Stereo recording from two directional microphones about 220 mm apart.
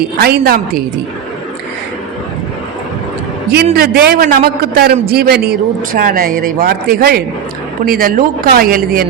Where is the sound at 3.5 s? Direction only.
45° right (ahead or behind).